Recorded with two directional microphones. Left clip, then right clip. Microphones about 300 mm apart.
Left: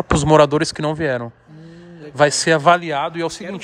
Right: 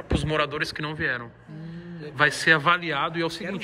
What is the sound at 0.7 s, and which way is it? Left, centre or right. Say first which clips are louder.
A man's voice: left 7 dB; centre.